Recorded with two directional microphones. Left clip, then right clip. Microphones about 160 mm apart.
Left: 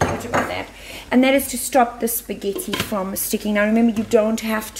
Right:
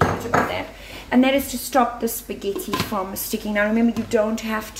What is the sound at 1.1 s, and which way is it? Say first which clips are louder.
Speech: left 2 dB; 60° left (ahead or behind).